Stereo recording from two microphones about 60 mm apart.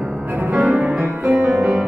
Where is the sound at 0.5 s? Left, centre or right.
Centre.